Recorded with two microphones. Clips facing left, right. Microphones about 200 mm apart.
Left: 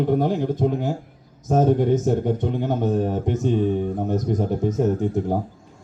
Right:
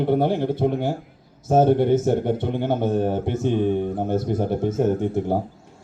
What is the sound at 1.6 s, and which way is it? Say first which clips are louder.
Speech: right 1 dB; 75° right (ahead or behind).